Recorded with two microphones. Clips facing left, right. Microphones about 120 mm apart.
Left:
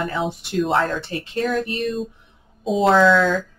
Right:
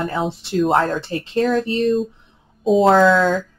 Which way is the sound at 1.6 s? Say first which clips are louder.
Right 6 dB; 30° right (ahead or behind).